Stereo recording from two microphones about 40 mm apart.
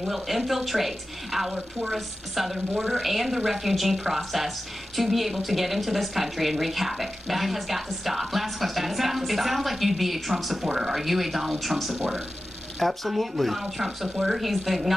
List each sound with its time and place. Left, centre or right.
0.0 s speech: centre